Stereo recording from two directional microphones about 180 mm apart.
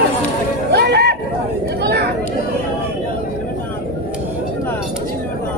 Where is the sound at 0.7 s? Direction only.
65° right (ahead or behind).